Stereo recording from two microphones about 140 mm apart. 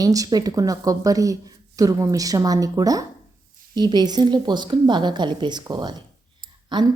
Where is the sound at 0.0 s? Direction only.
25° right (ahead or behind).